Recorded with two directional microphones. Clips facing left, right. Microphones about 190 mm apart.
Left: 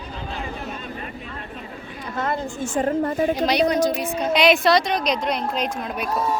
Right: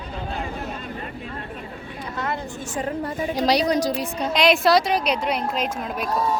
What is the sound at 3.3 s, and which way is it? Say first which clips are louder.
Speech: even; 35° right (ahead or behind).